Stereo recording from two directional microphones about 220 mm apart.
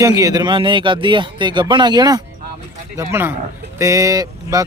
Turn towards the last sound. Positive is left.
turn(degrees=-15)  # may be behind; listen again after turning